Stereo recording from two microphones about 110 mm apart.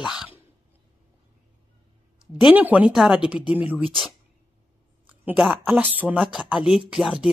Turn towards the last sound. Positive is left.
turn(degrees=-5)  # may be behind; listen again after turning